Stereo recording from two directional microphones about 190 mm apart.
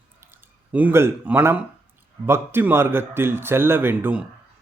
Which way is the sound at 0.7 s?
10° right (ahead or behind).